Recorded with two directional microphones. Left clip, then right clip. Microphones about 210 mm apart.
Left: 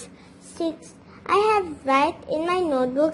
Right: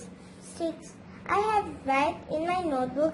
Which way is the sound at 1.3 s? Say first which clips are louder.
Left 6 dB; 50° left (ahead or behind).